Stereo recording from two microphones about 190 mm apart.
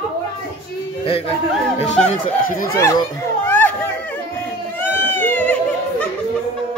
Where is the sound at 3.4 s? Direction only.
10° left (ahead or behind).